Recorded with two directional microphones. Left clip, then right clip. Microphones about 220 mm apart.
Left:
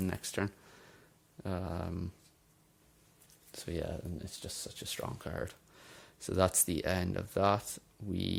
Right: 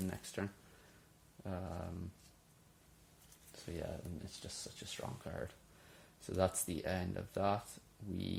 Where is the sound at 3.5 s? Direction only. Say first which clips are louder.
Left 6 dB; 50° left (ahead or behind).